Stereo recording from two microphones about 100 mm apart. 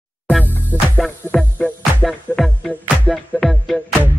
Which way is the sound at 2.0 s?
5° left (ahead or behind).